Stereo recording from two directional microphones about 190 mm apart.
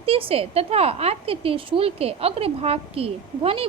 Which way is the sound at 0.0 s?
30° right (ahead or behind).